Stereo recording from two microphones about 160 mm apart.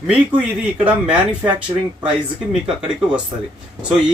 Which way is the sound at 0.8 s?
10° right (ahead or behind).